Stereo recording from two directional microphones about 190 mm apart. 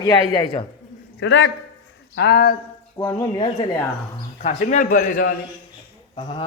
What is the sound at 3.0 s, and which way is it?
Speech, 15° left (ahead or behind).